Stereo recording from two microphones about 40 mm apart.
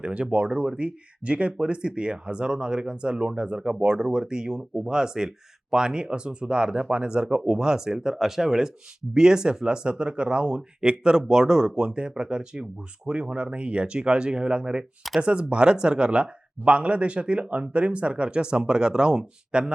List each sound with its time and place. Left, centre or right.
0.0 s speech: right